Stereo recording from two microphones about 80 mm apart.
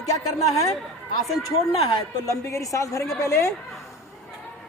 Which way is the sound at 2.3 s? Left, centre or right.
Left.